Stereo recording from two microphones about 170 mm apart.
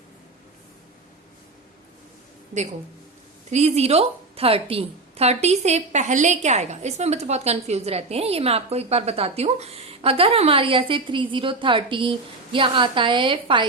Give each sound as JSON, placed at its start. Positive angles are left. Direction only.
{"t": 3.5, "sound": "a woman's voice", "side_deg": -40}